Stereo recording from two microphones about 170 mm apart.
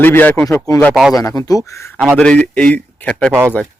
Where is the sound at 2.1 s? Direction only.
5° left (ahead or behind).